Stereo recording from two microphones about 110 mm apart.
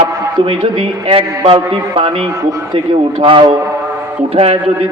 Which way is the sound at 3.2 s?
50° right (ahead or behind).